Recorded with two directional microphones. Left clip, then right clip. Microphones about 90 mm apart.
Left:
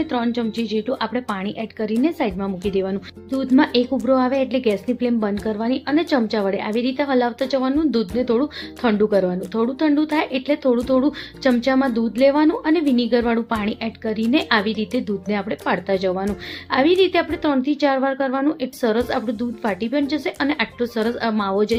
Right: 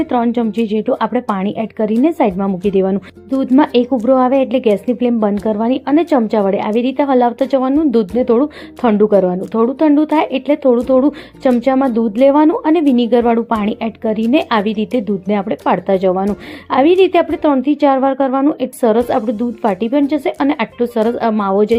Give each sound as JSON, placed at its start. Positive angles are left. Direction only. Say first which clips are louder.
{"t": 0.0, "sound": "speech", "louder": "right 7 dB", "side_deg": -60}
{"t": 2.6, "sound": "a woman's voice", "louder": "right 8 dB", "side_deg": -55}